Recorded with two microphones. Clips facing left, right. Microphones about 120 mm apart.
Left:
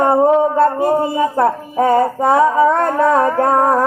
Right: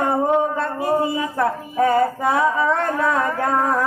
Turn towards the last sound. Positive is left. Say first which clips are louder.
# left 6 dB
turn(degrees=35)  # may be behind; listen again after turning